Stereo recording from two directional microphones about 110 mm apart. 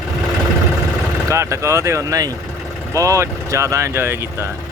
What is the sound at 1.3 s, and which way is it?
Speech, 25° right (ahead or behind).